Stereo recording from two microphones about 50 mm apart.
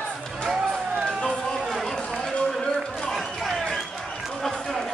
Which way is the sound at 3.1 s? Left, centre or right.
Centre.